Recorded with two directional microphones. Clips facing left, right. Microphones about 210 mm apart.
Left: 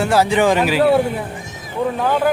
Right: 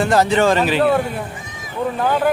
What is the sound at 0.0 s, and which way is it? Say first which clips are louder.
Speech: even; 10° left (ahead or behind).